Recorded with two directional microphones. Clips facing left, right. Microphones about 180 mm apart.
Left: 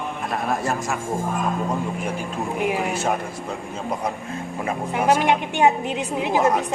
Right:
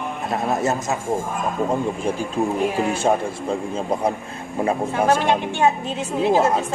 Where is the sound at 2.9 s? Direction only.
30° right (ahead or behind).